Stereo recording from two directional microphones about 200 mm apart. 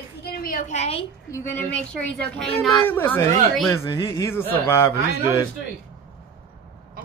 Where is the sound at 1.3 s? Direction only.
10° left (ahead or behind).